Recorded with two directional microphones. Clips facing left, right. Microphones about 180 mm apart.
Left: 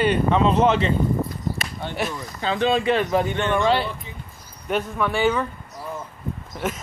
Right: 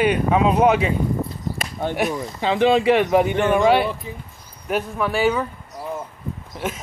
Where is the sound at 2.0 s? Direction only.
25° right (ahead or behind); by 5.4 s 5° right (ahead or behind).